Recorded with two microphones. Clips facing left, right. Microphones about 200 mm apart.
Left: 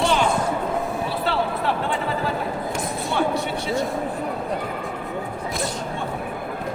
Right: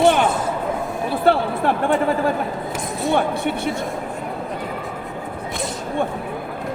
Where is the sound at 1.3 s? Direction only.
50° right (ahead or behind).